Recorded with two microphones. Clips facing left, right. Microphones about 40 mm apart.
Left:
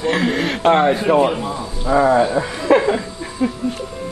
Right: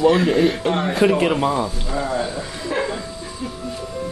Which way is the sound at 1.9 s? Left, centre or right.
Left.